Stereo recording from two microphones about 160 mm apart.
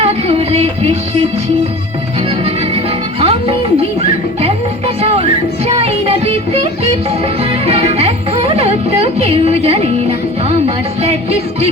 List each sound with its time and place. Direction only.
0.0 s music: 40° right (ahead or behind)
3.2 s music: 35° right (ahead or behind)
5.0 s music: 40° right (ahead or behind)